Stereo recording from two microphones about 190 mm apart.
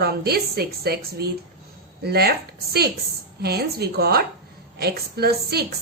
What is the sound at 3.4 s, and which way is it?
A woman's voice, 55° right (ahead or behind).